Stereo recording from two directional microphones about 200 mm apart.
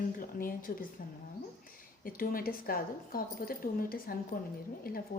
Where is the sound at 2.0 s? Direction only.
45° left (ahead or behind).